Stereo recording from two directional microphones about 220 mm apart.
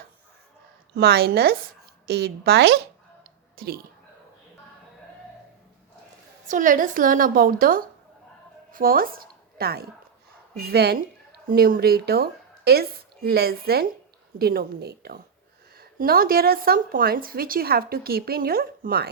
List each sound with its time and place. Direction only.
0.9 s speech: 45° right (ahead or behind)
6.5 s a woman's voice: 35° right (ahead or behind)